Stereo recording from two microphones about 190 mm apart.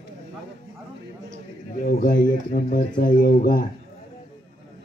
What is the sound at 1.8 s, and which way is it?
Speech, 45° left (ahead or behind).